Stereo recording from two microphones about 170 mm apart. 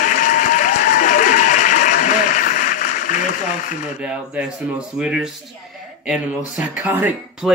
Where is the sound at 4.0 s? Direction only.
5° right (ahead or behind).